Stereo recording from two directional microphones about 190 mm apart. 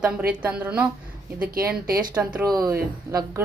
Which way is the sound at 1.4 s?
50° right (ahead or behind).